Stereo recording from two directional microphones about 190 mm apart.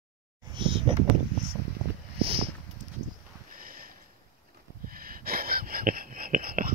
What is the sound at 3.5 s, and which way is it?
Sniff, 50° right (ahead or behind).